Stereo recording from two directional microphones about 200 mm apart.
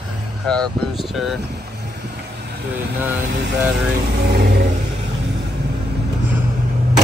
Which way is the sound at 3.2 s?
50° right (ahead or behind).